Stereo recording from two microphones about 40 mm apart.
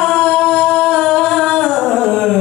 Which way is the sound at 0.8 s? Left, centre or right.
Centre.